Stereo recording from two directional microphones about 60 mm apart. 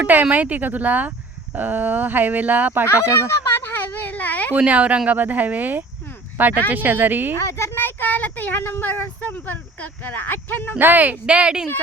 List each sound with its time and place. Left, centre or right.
0.0 s speech: right
2.8 s speech: left
3.6 s a sound: left
4.5 s speech: right
7.3 s a sound: left
8.8 s speech: left
10.8 s speech: right